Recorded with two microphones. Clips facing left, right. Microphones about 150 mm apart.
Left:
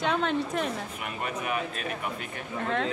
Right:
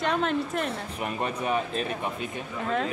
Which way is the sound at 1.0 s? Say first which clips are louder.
Right 7 dB; 30° right (ahead or behind).